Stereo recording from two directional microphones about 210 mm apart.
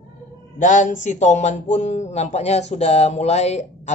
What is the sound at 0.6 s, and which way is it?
Speech, 35° left (ahead or behind).